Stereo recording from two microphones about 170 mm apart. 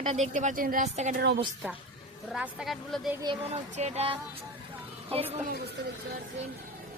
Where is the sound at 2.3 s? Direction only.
Centre (ahead or behind).